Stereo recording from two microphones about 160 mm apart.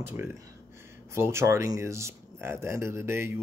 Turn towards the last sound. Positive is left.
turn(degrees=-15)  # may be behind; listen again after turning